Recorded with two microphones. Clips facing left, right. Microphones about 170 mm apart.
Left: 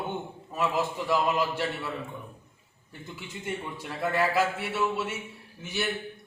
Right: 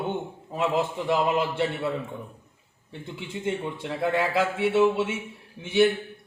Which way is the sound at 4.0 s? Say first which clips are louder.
Right 1 dB; 25° right (ahead or behind).